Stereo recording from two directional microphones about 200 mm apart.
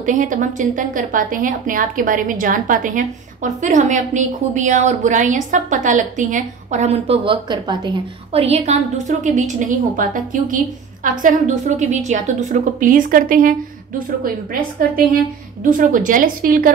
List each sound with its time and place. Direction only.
0.0 s a woman's voice: 40° right (ahead or behind)